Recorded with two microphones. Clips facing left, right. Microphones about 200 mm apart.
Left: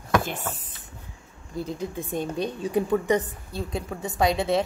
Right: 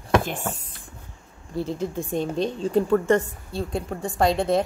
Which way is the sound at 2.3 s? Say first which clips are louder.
Right 3 dB; 25° right (ahead or behind).